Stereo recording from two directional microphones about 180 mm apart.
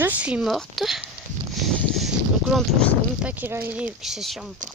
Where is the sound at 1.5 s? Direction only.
Centre (ahead or behind).